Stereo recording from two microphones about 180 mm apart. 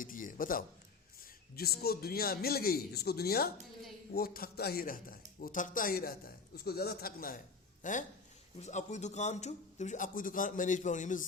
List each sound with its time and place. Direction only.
0.0 s a man's voice: 45° left (ahead or behind)